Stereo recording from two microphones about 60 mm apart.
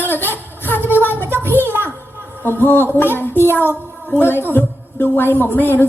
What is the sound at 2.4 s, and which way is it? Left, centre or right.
A woman's voice, left.